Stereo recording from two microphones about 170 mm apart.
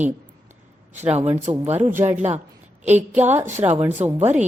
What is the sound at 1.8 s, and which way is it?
Speech, 10° right (ahead or behind).